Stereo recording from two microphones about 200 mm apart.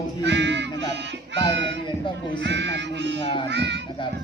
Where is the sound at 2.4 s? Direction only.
60° right (ahead or behind).